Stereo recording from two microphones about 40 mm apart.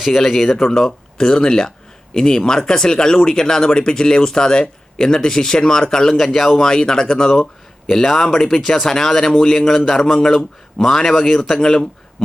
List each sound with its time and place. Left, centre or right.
0.0 s speech: centre
6.1 s speech: centre
7.9 s speech: centre